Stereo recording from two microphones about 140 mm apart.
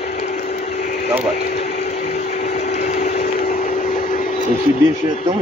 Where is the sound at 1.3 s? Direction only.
60° left (ahead or behind).